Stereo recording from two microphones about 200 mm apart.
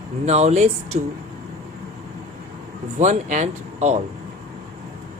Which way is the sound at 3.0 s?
35° right (ahead or behind).